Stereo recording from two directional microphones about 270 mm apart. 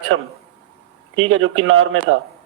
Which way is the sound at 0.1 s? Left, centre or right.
Right.